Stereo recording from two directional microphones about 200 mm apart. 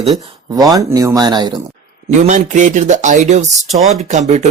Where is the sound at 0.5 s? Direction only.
20° right (ahead or behind).